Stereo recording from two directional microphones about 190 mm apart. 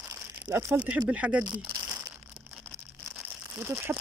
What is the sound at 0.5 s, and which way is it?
Speech, 10° right (ahead or behind).